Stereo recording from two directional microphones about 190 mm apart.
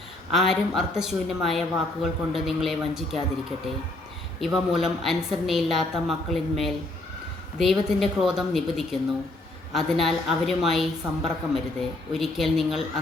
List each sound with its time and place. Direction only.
0.3 s a woman's voice: centre (ahead or behind)
4.4 s a woman's voice: centre (ahead or behind)